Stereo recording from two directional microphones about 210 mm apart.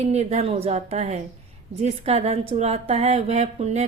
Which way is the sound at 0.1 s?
30° right (ahead or behind).